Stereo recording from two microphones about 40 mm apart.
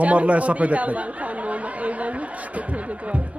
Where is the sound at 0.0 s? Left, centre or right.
Right.